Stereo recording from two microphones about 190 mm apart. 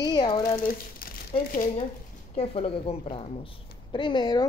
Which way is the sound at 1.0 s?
50° left (ahead or behind).